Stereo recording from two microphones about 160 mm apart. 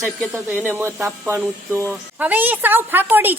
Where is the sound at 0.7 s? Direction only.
15° right (ahead or behind).